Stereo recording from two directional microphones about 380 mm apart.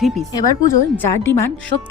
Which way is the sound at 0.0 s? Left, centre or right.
Centre.